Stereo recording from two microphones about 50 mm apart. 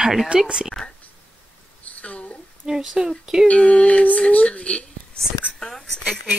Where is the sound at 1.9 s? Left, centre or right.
Left.